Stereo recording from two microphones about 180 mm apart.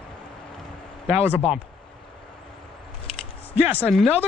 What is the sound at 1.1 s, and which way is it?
Speech, 10° right (ahead or behind).